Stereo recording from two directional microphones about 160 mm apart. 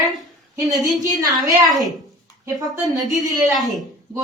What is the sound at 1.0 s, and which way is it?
Speech, 20° right (ahead or behind).